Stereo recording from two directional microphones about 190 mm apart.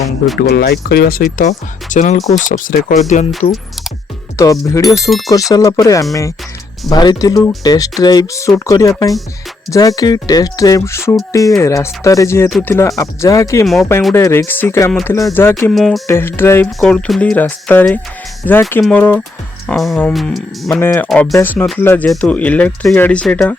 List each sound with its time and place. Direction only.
0.3 s speech: 55° left (ahead or behind); by 2.1 s 40° left (ahead or behind)
2.1 s speech: centre (ahead or behind)
2.4 s speech: 45° left (ahead or behind)
4.4 s speech: 15° left (ahead or behind)
4.9 s speech: centre (ahead or behind)
5.3 s speech: 20° left (ahead or behind)
15.7 s speech: centre (ahead or behind)
16.0 s speech: 10° left (ahead or behind)
20.7 s speech: 15° left (ahead or behind)